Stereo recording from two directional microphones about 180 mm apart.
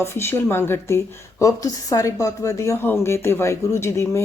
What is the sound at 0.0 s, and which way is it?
A woman's voice, 15° left (ahead or behind).